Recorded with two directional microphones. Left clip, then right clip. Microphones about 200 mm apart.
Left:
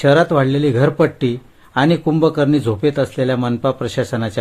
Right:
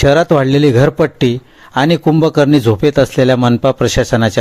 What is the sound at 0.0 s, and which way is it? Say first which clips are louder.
Speech: right 3 dB; 35° right (ahead or behind).